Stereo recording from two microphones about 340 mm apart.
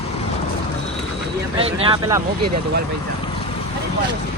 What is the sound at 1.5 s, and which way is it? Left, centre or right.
Speech, centre.